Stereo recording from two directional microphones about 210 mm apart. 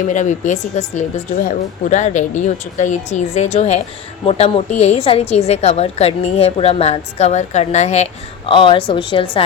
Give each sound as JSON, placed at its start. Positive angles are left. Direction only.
{"t": 0.1, "sound": "a woman's voice", "side_deg": 35}